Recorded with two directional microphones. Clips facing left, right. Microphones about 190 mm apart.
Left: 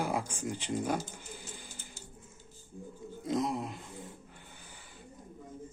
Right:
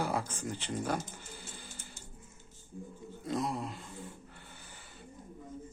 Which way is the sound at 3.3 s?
20° left (ahead or behind).